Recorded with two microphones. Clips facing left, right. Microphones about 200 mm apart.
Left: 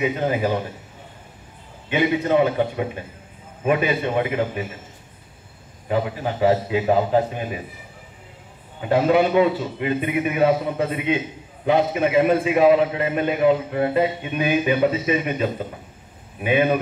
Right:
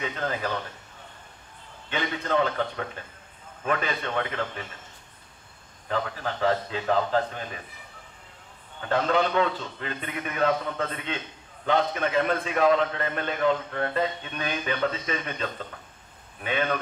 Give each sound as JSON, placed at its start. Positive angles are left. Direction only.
{"t": 0.0, "sound": "a man's voice", "side_deg": 10}
{"t": 1.9, "sound": "a man's voice", "side_deg": 10}
{"t": 5.9, "sound": "a man's voice", "side_deg": 15}
{"t": 8.8, "sound": "a man's voice", "side_deg": 10}